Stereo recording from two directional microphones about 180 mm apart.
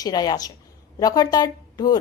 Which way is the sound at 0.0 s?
20° left (ahead or behind).